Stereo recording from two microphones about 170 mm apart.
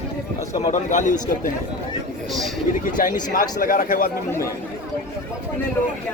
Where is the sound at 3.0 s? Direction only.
55° left (ahead or behind).